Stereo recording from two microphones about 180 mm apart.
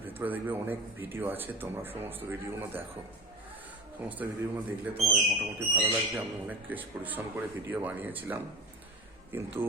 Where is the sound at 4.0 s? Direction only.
10° right (ahead or behind).